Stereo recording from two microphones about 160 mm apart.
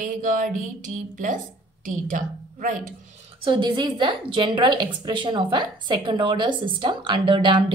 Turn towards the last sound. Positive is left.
turn(degrees=-30)  # may be behind; listen again after turning